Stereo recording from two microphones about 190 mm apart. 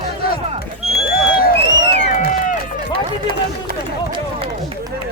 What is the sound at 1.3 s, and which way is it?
Crowd, 50° left (ahead or behind).